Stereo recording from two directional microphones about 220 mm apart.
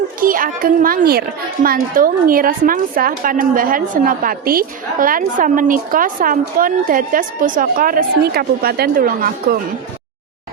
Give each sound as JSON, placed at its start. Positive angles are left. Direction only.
{"t": 0.2, "sound": "a woman's voice", "side_deg": -40}